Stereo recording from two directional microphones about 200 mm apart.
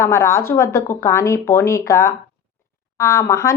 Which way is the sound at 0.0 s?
15° left (ahead or behind).